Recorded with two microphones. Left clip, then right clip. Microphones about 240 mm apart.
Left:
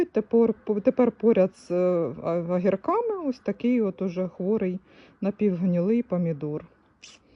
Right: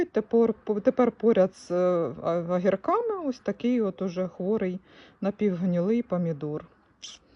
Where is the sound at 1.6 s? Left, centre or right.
Right.